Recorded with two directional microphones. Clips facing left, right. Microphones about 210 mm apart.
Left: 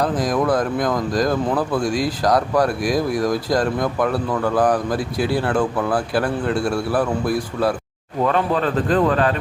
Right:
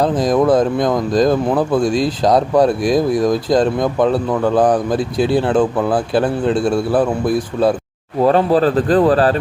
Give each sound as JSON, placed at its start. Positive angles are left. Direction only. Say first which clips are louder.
{"t": 0.0, "sound": "speech", "louder": "right 5 dB", "side_deg": -25}
{"t": 8.2, "sound": "a man's voice", "louder": "right 7 dB", "side_deg": -35}